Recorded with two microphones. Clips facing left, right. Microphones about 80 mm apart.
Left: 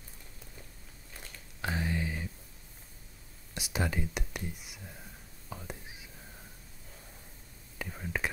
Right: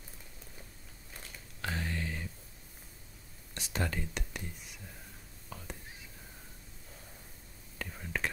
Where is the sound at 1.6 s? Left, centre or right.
Centre.